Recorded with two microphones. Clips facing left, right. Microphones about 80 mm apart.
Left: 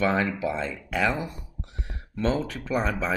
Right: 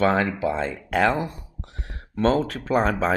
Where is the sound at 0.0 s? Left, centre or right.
Right.